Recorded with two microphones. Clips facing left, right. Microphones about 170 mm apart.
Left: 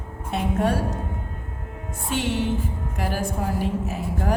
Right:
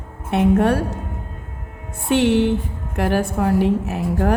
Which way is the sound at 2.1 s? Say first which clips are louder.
Right 9 dB; 65° right (ahead or behind).